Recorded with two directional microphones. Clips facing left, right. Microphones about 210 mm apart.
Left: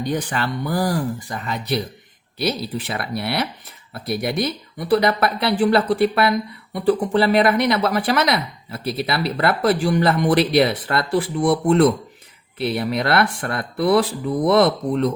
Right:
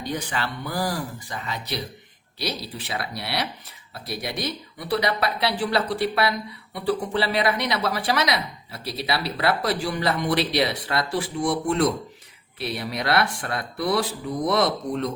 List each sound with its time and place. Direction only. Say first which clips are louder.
0.1 s speech: left 3 dB; 50° left (ahead or behind)